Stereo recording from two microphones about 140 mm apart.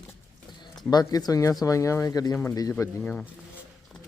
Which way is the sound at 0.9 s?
30° left (ahead or behind).